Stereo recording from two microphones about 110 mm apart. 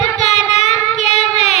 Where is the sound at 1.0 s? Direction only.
90° left.